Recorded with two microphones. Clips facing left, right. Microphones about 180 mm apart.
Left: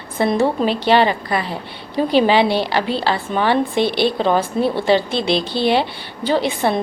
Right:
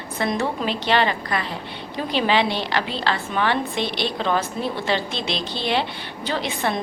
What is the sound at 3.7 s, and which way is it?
Speech, 5° left (ahead or behind).